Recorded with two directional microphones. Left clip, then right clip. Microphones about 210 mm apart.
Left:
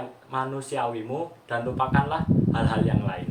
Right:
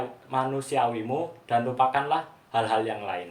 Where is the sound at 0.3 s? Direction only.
25° right (ahead or behind).